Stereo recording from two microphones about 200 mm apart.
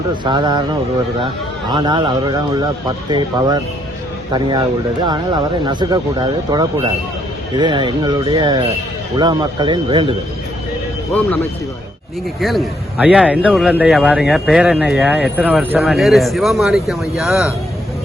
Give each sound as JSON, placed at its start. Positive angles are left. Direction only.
{"t": 0.3, "sound": "speech", "side_deg": -20}
{"t": 1.7, "sound": "speech", "side_deg": -20}
{"t": 12.4, "sound": "a man's voice", "side_deg": 0}